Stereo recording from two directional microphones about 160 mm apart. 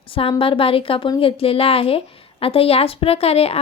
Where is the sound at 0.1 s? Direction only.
35° left (ahead or behind).